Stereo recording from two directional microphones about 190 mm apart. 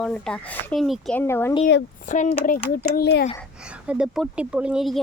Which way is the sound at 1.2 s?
10° left (ahead or behind).